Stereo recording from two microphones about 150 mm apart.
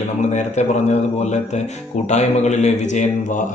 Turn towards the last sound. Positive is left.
turn(degrees=50)  # may be behind; listen again after turning